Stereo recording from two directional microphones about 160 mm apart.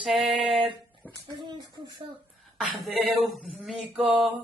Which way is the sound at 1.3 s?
30° right (ahead or behind).